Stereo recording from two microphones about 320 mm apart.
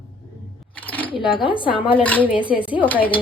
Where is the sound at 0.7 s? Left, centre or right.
Centre.